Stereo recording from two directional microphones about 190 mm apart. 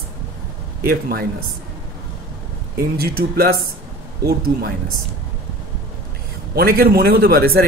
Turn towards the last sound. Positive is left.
turn(degrees=-55)  # may be behind; listen again after turning